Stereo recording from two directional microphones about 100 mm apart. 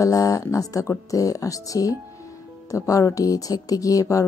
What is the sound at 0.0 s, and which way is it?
Speech, 35° left (ahead or behind).